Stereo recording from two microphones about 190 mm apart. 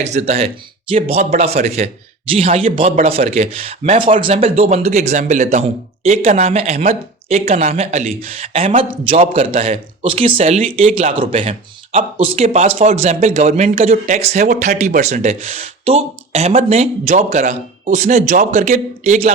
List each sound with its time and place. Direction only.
0.0 s a man's voice: 35° right (ahead or behind)